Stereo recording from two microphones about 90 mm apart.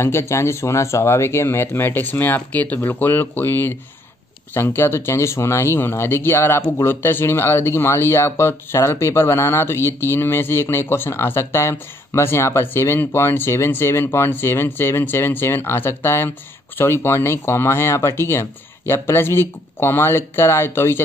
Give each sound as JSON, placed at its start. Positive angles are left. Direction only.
{"t": 0.0, "sound": "speech", "side_deg": 30}